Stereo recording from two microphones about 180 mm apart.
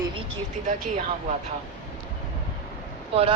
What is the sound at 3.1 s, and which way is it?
Speech, 30° right (ahead or behind).